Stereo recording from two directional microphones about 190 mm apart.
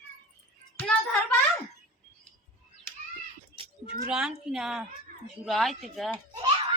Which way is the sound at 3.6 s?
25° right (ahead or behind).